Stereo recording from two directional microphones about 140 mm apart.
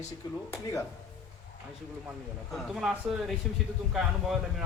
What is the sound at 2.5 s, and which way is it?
Speech, centre (ahead or behind).